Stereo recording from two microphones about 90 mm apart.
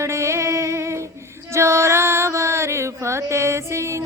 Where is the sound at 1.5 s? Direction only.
30° right (ahead or behind).